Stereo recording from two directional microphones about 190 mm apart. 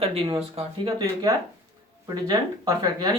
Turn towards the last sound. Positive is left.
turn(degrees=-20)  # may be behind; listen again after turning